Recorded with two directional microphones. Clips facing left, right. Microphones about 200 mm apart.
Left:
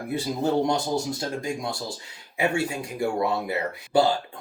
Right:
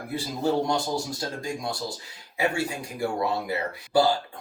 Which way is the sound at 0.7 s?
20° left (ahead or behind).